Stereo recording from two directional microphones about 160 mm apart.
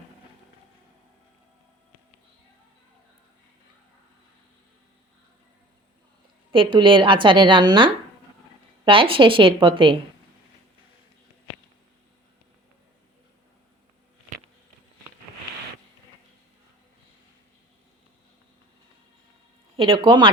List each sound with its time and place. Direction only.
6.5 s a woman's voice: 30° right (ahead or behind)
19.7 s a woman's voice: 35° right (ahead or behind)